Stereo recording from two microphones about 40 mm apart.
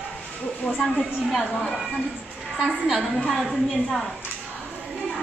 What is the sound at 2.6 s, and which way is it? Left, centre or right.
Speech, centre.